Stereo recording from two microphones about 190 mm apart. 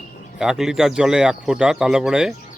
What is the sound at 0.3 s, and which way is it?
Speech, centre (ahead or behind).